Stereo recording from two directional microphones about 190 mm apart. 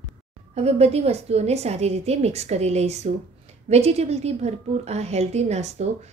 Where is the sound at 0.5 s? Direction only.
35° right (ahead or behind).